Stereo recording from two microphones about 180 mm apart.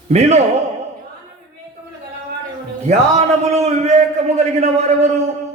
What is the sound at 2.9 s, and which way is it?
A man's voice, 35° right (ahead or behind).